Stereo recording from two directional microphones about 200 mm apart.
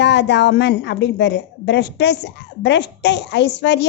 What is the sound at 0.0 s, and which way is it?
A woman's voice, 60° left (ahead or behind).